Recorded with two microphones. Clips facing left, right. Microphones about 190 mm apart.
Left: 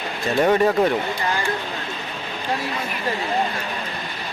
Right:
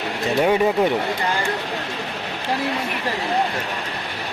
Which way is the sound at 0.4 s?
10° right (ahead or behind).